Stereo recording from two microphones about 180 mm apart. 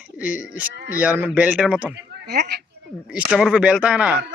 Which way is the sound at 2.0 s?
65° right (ahead or behind).